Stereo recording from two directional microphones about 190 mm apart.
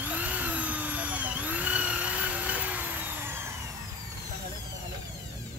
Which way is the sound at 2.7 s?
10° right (ahead or behind).